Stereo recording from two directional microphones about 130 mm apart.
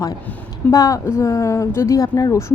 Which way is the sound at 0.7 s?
25° left (ahead or behind).